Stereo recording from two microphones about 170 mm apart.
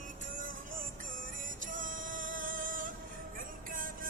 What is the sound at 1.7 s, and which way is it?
Music, 50° right (ahead or behind).